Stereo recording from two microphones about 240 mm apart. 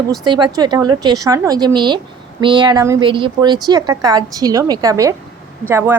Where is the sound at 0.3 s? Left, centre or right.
Centre.